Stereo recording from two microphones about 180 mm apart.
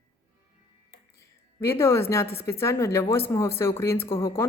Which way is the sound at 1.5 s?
15° left (ahead or behind).